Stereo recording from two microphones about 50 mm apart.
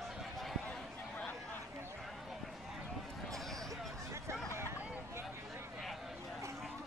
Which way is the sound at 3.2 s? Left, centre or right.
Centre.